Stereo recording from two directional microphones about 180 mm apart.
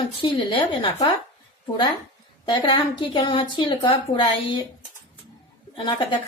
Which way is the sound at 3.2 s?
25° left (ahead or behind).